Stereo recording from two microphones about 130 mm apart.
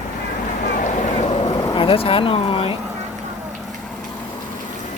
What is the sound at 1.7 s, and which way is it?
Speech, 45° left (ahead or behind).